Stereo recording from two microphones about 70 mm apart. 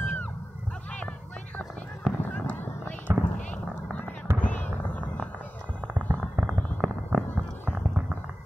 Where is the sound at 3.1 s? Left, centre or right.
Right.